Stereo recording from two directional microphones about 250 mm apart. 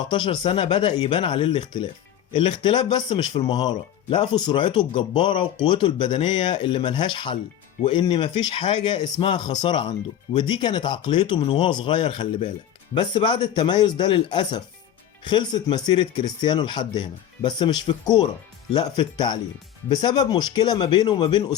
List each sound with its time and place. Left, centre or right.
0.1 s speech: centre